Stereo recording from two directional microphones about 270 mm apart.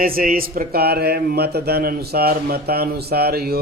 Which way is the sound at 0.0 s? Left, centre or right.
Right.